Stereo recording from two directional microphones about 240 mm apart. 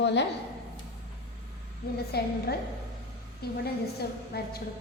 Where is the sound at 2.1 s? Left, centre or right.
Left.